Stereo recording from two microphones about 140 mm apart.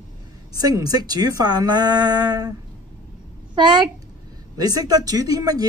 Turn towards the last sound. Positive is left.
turn(degrees=-25)  # may be behind; listen again after turning